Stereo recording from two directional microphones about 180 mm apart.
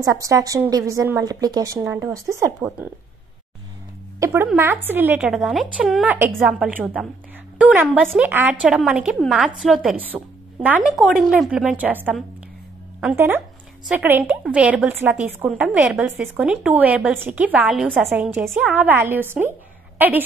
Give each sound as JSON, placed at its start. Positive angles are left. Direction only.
{"t": 0.0, "sound": "a woman's voice", "side_deg": -20}
{"t": 4.2, "sound": "a woman's voice", "side_deg": -15}